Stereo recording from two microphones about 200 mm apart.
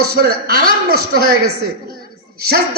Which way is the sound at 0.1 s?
50° right (ahead or behind).